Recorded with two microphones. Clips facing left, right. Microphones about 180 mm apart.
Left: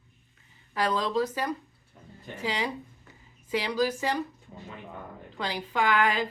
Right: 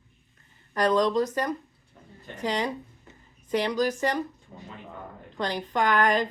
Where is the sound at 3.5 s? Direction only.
5° left (ahead or behind).